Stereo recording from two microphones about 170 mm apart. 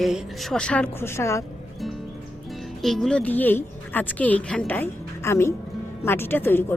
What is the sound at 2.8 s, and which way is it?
A woman's voice, centre (ahead or behind).